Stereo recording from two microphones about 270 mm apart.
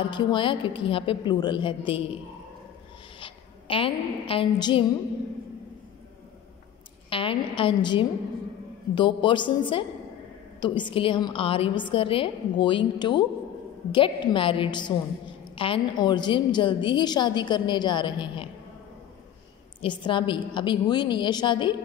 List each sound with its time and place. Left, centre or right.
0.1 s a woman's voice: centre
3.2 s a woman's voice: centre
7.1 s a woman's voice: centre
19.8 s a woman's voice: centre